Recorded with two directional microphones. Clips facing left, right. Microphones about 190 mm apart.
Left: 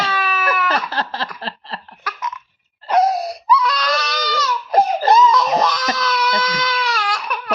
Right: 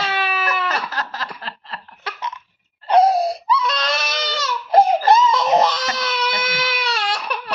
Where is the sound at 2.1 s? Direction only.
30° right (ahead or behind).